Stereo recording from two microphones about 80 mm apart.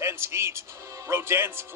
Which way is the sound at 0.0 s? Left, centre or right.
Right.